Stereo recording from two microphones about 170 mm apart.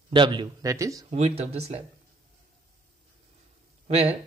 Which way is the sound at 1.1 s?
35° right (ahead or behind).